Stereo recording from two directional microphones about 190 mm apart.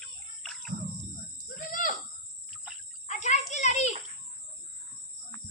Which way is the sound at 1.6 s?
45° left (ahead or behind).